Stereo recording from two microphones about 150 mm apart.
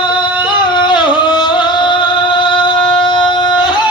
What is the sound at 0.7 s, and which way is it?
Music, 30° left (ahead or behind).